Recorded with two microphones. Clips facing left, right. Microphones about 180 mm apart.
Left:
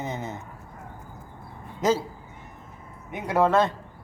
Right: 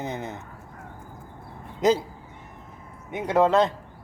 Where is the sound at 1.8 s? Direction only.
15° right (ahead or behind).